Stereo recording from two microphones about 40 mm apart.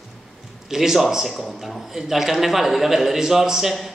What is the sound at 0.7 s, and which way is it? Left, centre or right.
A man's voice, centre.